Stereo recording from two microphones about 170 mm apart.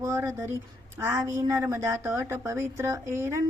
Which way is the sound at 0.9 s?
15° right (ahead or behind).